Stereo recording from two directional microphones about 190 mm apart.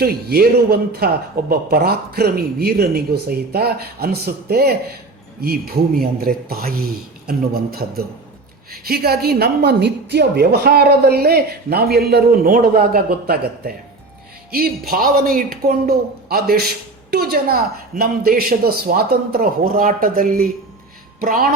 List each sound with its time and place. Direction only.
0.0 s a man's voice: 55° right (ahead or behind)